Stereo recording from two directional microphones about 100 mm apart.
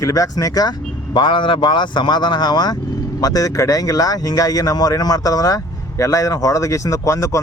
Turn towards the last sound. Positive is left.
turn(degrees=30)  # may be behind; listen again after turning